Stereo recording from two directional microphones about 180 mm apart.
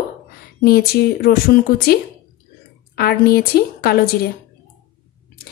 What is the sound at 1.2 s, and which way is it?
Speech, 55° left (ahead or behind).